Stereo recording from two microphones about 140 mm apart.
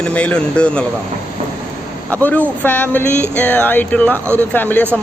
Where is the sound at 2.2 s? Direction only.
10° left (ahead or behind).